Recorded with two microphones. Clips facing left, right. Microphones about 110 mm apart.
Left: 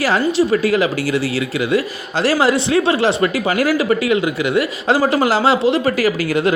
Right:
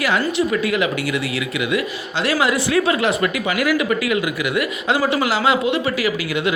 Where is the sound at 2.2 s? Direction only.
35° left (ahead or behind).